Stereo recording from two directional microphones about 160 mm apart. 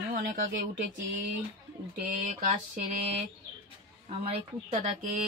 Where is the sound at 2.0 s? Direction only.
55° right (ahead or behind).